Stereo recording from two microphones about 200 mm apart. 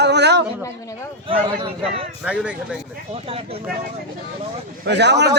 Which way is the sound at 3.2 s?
30° right (ahead or behind).